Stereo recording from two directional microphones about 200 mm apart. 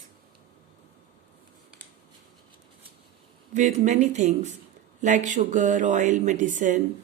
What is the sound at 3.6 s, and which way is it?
Speech, 35° right (ahead or behind).